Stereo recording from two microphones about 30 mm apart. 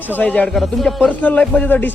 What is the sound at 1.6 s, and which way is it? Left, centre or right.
Music, left.